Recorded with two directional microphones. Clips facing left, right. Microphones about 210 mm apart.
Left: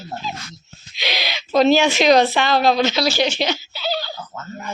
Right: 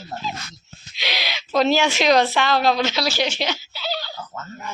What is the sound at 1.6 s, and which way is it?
Speech, 5° right (ahead or behind).